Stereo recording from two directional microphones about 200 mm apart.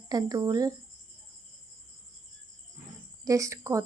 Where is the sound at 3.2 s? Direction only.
15° right (ahead or behind).